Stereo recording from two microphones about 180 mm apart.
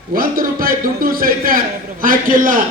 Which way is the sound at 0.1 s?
55° right (ahead or behind).